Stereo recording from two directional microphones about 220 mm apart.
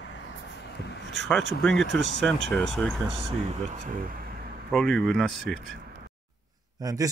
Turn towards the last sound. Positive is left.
turn(degrees=-15)  # may be behind; listen again after turning